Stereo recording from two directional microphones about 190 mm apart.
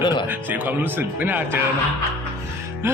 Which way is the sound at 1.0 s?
10° right (ahead or behind).